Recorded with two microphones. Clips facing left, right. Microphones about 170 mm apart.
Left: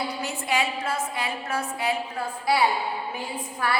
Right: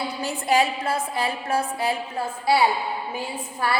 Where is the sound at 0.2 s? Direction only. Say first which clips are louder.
Right 8 dB; 35° right (ahead or behind).